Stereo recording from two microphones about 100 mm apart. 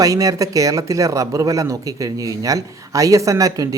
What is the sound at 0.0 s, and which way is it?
Speech, 35° right (ahead or behind).